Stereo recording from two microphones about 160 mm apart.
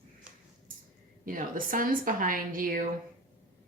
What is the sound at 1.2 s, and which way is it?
A woman's voice, 60° right (ahead or behind).